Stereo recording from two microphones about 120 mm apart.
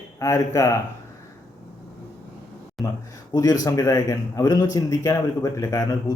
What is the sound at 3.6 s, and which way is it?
A man's voice, 30° left (ahead or behind).